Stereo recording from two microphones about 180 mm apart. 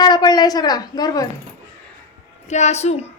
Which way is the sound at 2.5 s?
40° left (ahead or behind).